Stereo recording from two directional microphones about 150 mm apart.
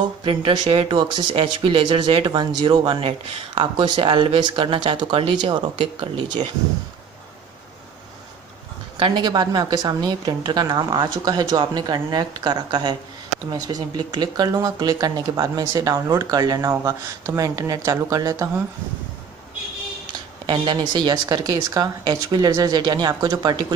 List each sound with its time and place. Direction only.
0.2 s speech: 35° right (ahead or behind)
8.9 s speech: 30° right (ahead or behind)
20.1 s speech: 30° right (ahead or behind)